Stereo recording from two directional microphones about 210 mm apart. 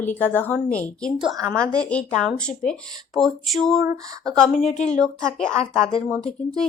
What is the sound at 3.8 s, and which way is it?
Speech, 15° right (ahead or behind).